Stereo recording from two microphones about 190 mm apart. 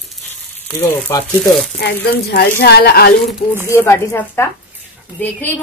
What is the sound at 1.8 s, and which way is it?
A woman's voice, 60° left (ahead or behind).